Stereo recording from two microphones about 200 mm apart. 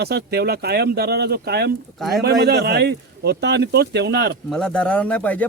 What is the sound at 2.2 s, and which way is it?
Speech, 55° right (ahead or behind).